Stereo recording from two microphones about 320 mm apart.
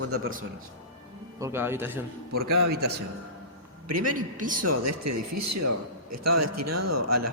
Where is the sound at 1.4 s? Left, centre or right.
Centre.